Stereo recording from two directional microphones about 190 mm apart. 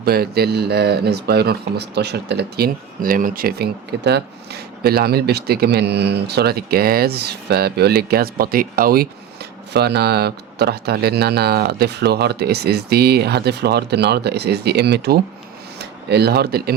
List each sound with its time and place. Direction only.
0.0 s speech: 55° right (ahead or behind)